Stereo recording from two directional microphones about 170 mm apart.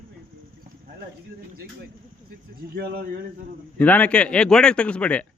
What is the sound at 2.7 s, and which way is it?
Speech, 60° right (ahead or behind).